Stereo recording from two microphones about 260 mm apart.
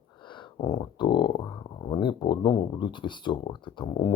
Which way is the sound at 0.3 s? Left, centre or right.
Centre.